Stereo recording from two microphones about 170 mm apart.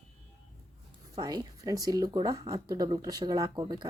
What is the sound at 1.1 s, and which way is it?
Speech, 20° right (ahead or behind).